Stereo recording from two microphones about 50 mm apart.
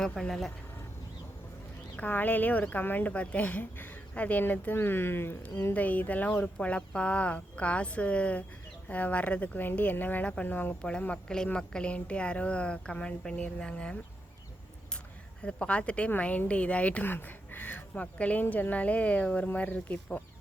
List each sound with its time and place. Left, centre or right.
0.0 s speech: centre
2.0 s speech: left
4.1 s speech: left
5.7 s speech: left
9.6 s speech: left
11.1 s speech: centre
15.4 s speech: left
17.1 s speech: left
17.9 s speech: left